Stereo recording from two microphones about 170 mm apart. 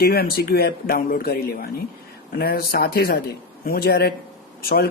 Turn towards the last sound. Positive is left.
turn(degrees=60)  # may be behind; listen again after turning